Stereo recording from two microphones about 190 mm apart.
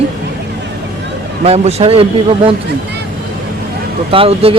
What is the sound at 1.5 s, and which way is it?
Speech, 35° right (ahead or behind).